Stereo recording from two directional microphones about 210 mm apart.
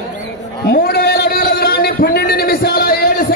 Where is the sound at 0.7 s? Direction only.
50° left (ahead or behind).